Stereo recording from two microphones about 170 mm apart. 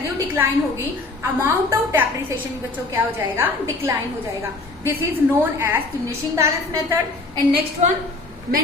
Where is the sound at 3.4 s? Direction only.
15° right (ahead or behind).